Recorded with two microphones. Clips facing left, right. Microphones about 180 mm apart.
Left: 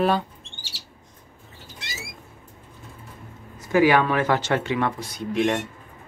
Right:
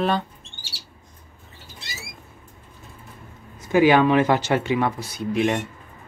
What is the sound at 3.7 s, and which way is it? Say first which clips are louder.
Speech: right 2 dB; 20° right (ahead or behind).